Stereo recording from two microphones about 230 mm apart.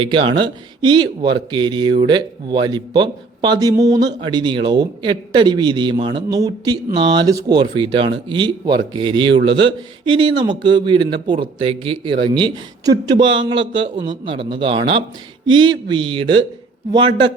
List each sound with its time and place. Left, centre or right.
0.0 s speech: right